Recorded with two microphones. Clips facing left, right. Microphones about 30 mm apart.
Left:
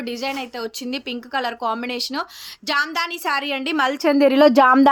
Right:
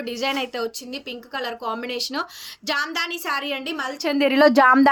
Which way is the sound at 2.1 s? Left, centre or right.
Centre.